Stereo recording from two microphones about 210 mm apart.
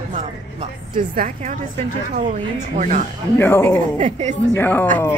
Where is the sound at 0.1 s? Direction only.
30° right (ahead or behind).